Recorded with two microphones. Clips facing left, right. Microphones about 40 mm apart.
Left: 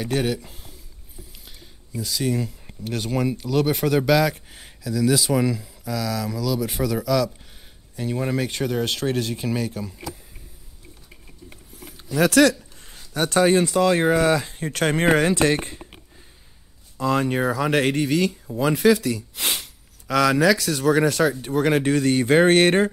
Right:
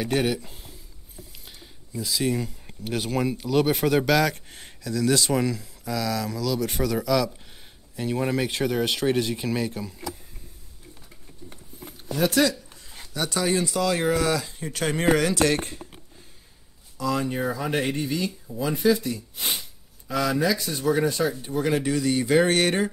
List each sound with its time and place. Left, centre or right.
0.0 s speech: centre
12.2 s speech: left
13.1 s speech: left
16.9 s speech: left